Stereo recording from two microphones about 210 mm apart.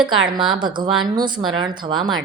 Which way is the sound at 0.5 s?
20° right (ahead or behind).